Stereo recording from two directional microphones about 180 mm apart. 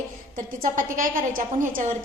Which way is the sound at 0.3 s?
50° right (ahead or behind).